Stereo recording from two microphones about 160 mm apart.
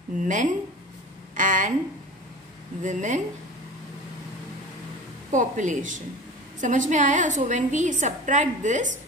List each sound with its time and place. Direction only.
0.2 s a woman's voice: 50° right (ahead or behind)
2.8 s a woman's voice: 50° right (ahead or behind)
5.3 s a woman's voice: 50° right (ahead or behind)